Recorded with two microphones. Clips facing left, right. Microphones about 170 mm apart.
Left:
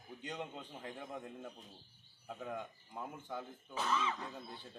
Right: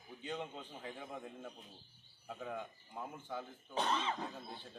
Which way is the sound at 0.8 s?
Centre (ahead or behind).